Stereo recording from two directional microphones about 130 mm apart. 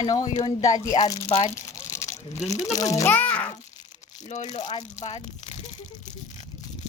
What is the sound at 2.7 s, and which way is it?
Speech, 25° left (ahead or behind).